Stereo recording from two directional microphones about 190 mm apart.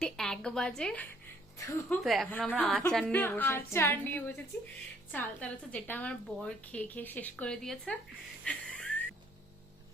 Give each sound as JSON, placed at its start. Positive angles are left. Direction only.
{"t": 0.0, "sound": "a woman's voice", "side_deg": 5}
{"t": 1.5, "sound": "a woman's voice", "side_deg": 15}
{"t": 2.0, "sound": "a woman's voice", "side_deg": 0}
{"t": 8.4, "sound": "music", "side_deg": 5}